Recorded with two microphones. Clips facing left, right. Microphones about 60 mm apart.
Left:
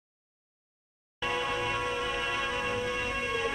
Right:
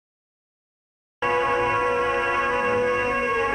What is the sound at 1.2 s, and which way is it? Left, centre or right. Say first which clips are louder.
Music: right 10 dB; right.